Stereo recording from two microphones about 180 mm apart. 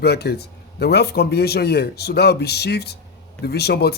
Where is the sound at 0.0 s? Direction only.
65° left (ahead or behind).